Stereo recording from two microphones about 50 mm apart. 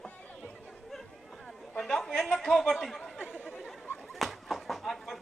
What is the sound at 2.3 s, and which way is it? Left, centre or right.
Speech, centre.